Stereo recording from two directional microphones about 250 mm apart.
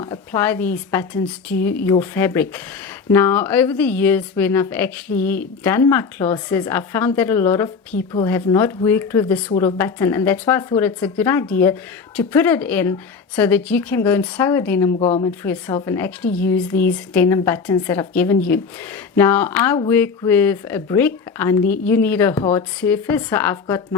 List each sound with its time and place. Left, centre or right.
0.3 s a woman's voice: centre
14.9 s speech: left
15.3 s a woman's voice: centre